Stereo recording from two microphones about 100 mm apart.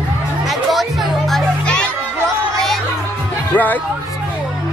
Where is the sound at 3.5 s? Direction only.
15° left (ahead or behind).